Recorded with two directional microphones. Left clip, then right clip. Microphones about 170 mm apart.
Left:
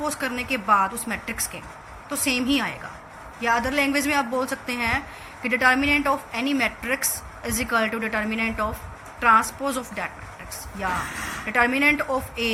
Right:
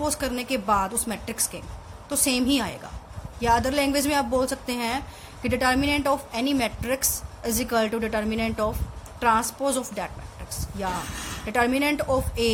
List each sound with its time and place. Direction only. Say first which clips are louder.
0.0 s a woman's voice: even; 90° right
0.8 s a woman's voice: left 3 dB; 70° right (ahead or behind)
2.0 s a woman's voice: even; 90° right; by 10.1 s 70° right (ahead or behind)
11.4 s a woman's voice: left 3 dB; 70° right (ahead or behind)